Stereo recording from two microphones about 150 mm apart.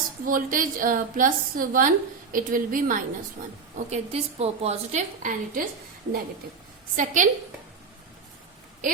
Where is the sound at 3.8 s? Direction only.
45° right (ahead or behind).